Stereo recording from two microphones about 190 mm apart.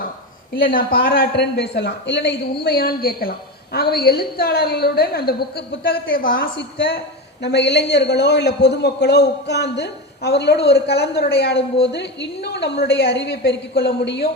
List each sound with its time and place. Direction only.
1.0 s a woman's voice: 55° left (ahead or behind)
2.6 s a woman's voice: 50° left (ahead or behind)